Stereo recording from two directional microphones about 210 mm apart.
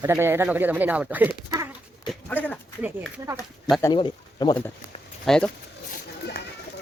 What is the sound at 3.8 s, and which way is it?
Speech, 20° left (ahead or behind).